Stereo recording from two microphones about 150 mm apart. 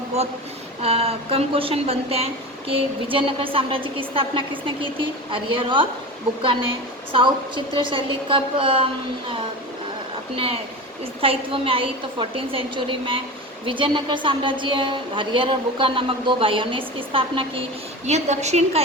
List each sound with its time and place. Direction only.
0.8 s speech: 40° right (ahead or behind)
7.1 s speech: 35° right (ahead or behind)
10.3 s speech: 40° right (ahead or behind)
18.0 s a woman's voice: 50° right (ahead or behind)